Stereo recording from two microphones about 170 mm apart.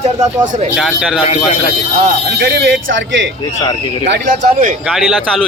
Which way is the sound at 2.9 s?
90° right.